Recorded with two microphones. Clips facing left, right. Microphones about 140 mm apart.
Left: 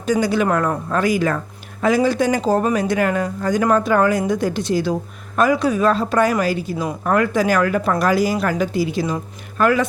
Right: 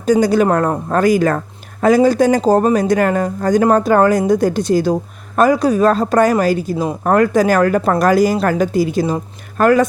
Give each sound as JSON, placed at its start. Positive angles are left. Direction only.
{"t": 0.0, "sound": "speech", "side_deg": -40}